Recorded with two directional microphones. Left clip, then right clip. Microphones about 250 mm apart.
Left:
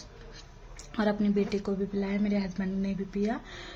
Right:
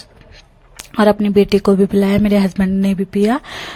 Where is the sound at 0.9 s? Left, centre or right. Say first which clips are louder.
Right 16 dB; right.